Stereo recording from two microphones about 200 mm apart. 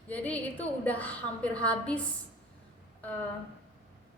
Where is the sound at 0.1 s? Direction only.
10° left (ahead or behind).